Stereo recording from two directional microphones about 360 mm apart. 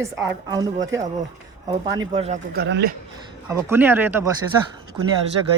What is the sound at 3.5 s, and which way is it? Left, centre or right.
Speech, centre.